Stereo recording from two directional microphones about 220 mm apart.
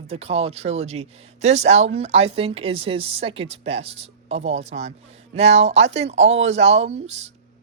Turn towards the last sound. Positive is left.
turn(degrees=-30)  # may be behind; listen again after turning